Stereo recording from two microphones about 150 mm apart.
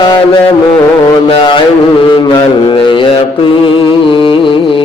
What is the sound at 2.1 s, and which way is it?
Mantra, 35° left (ahead or behind).